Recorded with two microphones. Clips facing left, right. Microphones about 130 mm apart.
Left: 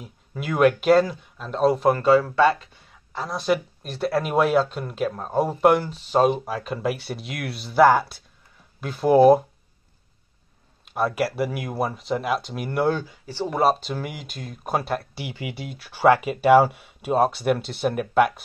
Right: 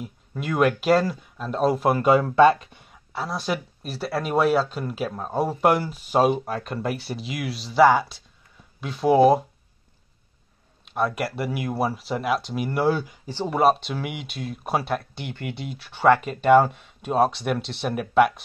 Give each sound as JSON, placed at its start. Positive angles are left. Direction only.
{"t": 0.0, "sound": "speech", "side_deg": 0}
{"t": 2.0, "sound": "speech", "side_deg": -20}
{"t": 3.1, "sound": "speech", "side_deg": 0}
{"t": 10.9, "sound": "speech", "side_deg": 0}
{"t": 13.0, "sound": "speech", "side_deg": -15}
{"t": 13.5, "sound": "speech", "side_deg": 0}